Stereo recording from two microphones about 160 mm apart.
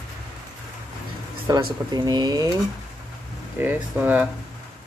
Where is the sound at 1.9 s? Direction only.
25° right (ahead or behind).